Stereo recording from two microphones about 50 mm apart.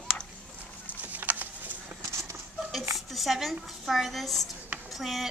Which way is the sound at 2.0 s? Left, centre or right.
Right.